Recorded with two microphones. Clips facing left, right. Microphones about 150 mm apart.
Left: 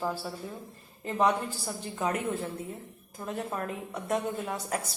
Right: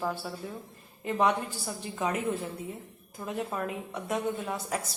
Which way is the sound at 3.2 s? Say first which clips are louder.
Right 1 dB; 5° right (ahead or behind).